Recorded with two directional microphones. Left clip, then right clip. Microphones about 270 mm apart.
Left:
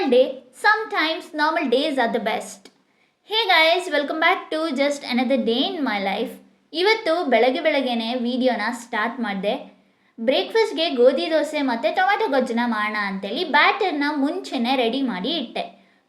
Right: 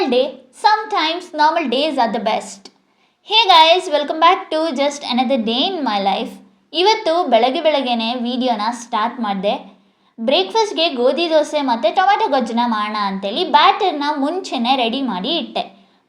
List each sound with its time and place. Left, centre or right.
0.0 s a woman's voice: centre
15.2 s a woman's voice: right